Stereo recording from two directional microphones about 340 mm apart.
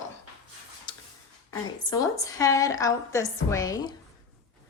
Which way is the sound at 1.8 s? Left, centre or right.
Centre.